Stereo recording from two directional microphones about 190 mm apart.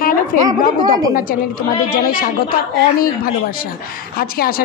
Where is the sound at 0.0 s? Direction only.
50° left (ahead or behind).